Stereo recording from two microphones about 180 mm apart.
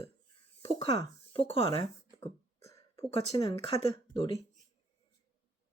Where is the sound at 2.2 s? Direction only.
15° left (ahead or behind).